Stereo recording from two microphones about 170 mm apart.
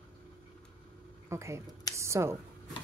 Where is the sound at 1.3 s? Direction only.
15° right (ahead or behind).